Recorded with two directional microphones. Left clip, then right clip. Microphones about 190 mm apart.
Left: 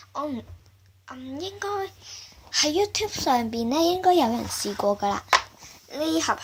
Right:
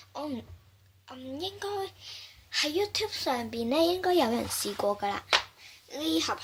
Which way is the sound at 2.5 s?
15° left (ahead or behind).